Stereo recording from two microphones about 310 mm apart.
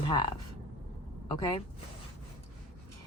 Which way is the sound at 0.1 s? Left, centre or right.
Centre.